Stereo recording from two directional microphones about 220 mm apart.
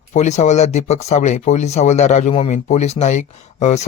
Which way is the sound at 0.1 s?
30° left (ahead or behind).